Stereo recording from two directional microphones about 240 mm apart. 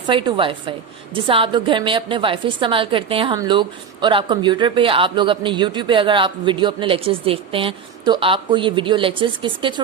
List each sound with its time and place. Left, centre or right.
0.1 s a woman's voice: right